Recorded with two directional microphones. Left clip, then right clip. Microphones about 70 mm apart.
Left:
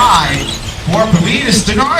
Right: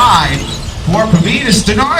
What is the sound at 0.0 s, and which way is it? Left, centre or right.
Shatter, centre.